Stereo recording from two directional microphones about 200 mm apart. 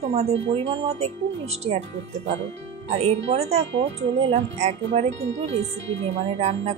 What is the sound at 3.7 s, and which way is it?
Speech, 65° right (ahead or behind).